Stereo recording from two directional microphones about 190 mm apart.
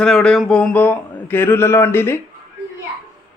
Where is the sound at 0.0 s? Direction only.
5° left (ahead or behind).